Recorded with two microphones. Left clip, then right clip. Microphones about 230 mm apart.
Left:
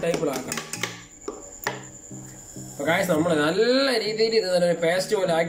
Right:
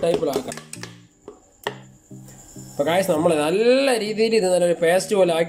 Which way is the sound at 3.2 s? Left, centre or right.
Right.